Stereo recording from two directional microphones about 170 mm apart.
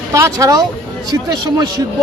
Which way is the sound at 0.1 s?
20° right (ahead or behind).